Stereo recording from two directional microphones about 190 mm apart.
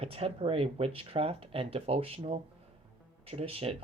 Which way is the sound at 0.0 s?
30° right (ahead or behind).